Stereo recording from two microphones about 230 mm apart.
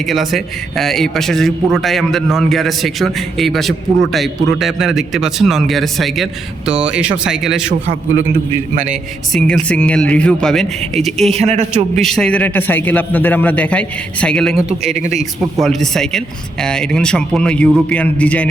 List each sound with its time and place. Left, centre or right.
0.0 s a man's voice: centre
8.7 s a man's voice: right
9.3 s a man's voice: centre
11.3 s speech: right
11.9 s a man's voice: centre
14.9 s speech: right
15.6 s a man's voice: centre